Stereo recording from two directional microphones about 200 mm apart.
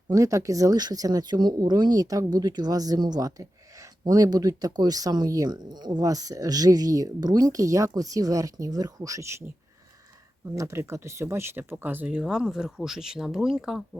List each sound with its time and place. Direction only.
0.1 s speech: 15° right (ahead or behind)
10.4 s speech: 15° right (ahead or behind)